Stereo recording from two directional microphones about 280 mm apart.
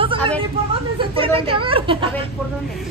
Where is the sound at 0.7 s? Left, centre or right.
Centre.